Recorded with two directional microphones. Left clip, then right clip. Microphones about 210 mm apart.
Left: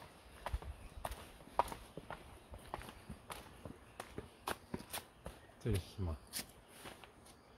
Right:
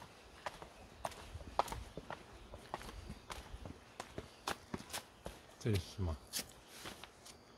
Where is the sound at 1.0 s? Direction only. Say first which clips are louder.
Right 2 dB; 5° right (ahead or behind).